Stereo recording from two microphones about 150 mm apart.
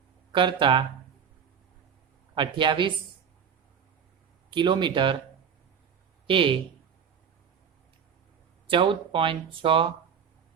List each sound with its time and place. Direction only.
0.3 s speech: 30° right (ahead or behind)
2.3 s speech: 30° right (ahead or behind)
4.5 s speech: 30° right (ahead or behind)
6.2 s speech: 35° right (ahead or behind)
8.6 s speech: 35° right (ahead or behind)